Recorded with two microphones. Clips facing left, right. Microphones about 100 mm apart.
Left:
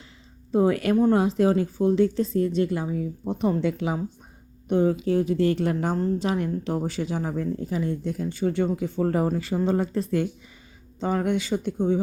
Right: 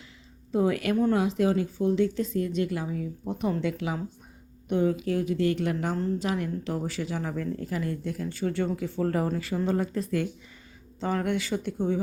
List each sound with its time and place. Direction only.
0.5 s speech: 35° left (ahead or behind); by 11.9 s 20° left (ahead or behind)